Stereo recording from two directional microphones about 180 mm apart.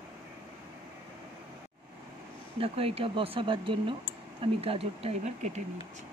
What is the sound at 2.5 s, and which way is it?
Speech, 30° right (ahead or behind).